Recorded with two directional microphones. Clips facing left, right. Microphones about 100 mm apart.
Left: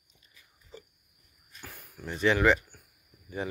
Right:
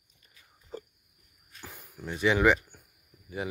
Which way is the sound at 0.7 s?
45° right (ahead or behind).